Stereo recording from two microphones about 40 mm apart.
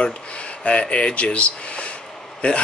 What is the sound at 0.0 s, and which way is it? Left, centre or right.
Speech, left.